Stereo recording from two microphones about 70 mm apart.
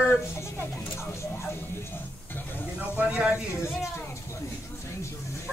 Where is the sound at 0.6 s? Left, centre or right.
Left.